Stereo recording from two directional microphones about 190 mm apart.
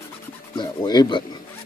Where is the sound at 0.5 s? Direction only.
25° left (ahead or behind).